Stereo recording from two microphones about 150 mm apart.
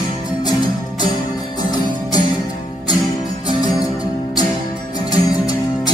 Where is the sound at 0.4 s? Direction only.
30° left (ahead or behind).